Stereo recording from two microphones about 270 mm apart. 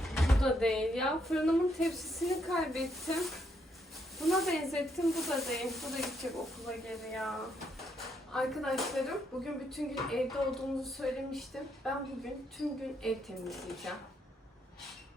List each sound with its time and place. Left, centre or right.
0.0 s speech: centre